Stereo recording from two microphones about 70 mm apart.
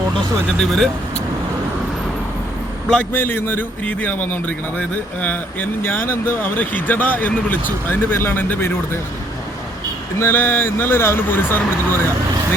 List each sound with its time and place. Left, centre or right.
0.6 s speech: centre
3.0 s a man's voice: left
10.2 s speech: left